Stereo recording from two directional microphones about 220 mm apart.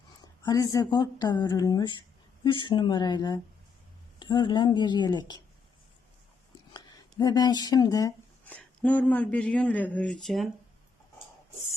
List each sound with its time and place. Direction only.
0.4 s a woman's voice: 15° left (ahead or behind)
7.2 s speech: 15° left (ahead or behind); by 10.5 s centre (ahead or behind)